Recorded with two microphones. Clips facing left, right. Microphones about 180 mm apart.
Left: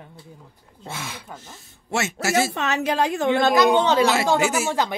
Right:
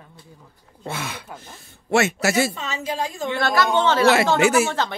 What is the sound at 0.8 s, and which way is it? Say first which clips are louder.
A man's voice: right 4 dB; 60° right (ahead or behind).